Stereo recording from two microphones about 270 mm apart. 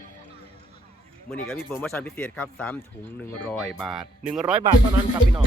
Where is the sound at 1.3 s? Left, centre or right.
Centre.